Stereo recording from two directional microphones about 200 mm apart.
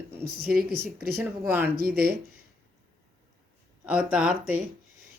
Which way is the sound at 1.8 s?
50° right (ahead or behind).